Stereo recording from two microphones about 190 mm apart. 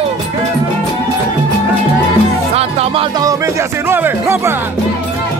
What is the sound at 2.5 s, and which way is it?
Music, 30° right (ahead or behind).